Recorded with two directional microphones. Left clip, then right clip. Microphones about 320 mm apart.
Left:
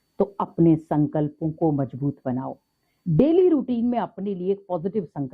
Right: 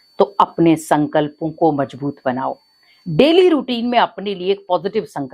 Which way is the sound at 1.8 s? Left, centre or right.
Centre.